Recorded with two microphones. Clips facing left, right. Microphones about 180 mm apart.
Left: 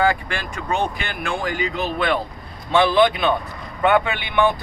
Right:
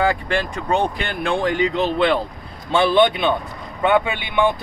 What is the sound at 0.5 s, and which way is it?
Speech, 30° right (ahead or behind).